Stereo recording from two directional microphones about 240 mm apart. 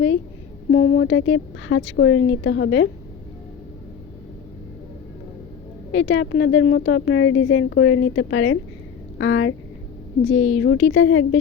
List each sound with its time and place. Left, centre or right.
0.7 s a woman's voice: left
5.9 s a woman's voice: left